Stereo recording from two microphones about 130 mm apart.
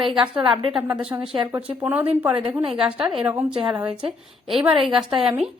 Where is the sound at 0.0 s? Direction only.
45° right (ahead or behind).